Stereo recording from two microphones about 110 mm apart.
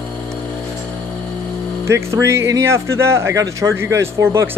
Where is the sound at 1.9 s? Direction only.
25° right (ahead or behind).